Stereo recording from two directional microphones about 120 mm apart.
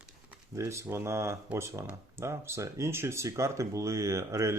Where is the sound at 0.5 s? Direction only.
25° right (ahead or behind).